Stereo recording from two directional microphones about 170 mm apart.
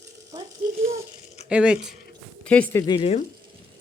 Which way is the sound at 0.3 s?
20° right (ahead or behind).